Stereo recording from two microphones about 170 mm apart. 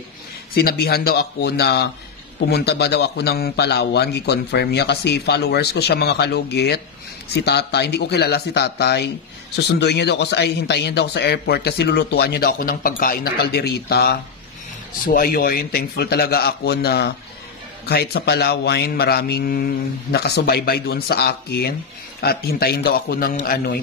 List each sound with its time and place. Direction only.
0.6 s a man's voice: 65° left (ahead or behind)